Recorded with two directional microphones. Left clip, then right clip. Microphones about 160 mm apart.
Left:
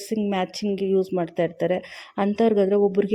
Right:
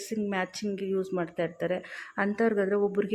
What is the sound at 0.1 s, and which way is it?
Speech, 35° left (ahead or behind).